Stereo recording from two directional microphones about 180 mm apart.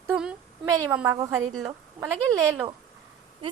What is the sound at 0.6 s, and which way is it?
A woman's voice, 15° right (ahead or behind).